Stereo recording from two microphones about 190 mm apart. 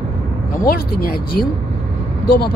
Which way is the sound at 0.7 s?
50° left (ahead or behind).